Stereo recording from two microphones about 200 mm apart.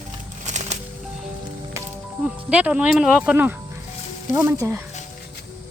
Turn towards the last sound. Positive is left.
turn(degrees=-15)  # may be behind; listen again after turning